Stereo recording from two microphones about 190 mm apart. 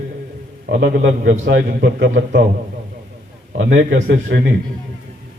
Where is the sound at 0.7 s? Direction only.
70° right (ahead or behind).